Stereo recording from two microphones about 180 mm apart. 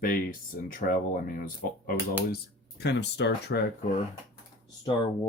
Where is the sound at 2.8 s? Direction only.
70° left (ahead or behind).